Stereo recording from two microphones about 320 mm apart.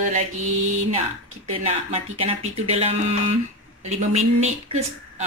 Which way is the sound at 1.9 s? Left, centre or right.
Centre.